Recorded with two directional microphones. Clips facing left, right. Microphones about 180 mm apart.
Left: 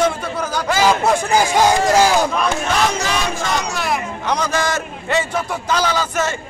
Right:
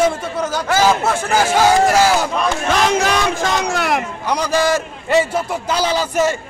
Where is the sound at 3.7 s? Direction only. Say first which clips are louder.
Right 3 dB; 65° right (ahead or behind).